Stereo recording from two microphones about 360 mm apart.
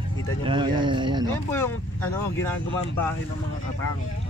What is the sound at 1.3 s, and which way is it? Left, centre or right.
Speech, centre.